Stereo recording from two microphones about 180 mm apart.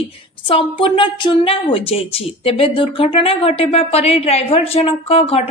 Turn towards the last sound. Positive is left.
turn(degrees=35)  # may be behind; listen again after turning